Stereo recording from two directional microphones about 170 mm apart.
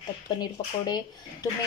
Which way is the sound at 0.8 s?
20° left (ahead or behind).